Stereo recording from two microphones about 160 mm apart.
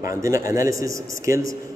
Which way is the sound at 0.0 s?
20° right (ahead or behind).